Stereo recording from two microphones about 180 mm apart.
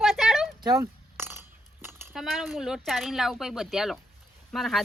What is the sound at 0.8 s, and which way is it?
Chink, 10° right (ahead or behind).